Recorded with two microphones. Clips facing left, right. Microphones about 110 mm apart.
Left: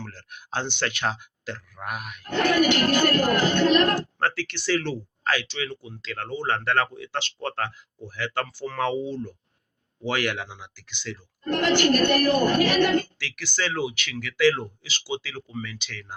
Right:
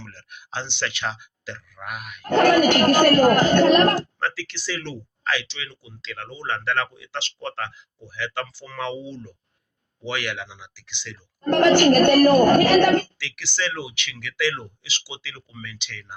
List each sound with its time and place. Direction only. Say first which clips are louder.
0.1 s speech: left 2 dB; 40° left (ahead or behind)
2.2 s speech: right 5 dB; 50° right (ahead or behind)
3.9 s speech: even; 55° left (ahead or behind)
11.4 s speech: right 6 dB; 45° right (ahead or behind)
13.1 s speech: right 1 dB; 45° left (ahead or behind)